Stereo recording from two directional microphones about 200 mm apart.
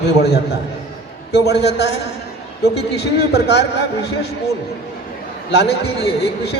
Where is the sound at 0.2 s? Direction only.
55° left (ahead or behind).